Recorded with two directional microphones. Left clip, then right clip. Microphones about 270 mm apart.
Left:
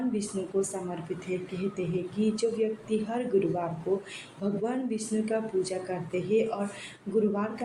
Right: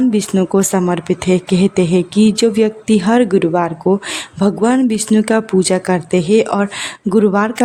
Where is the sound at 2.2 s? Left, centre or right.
Right.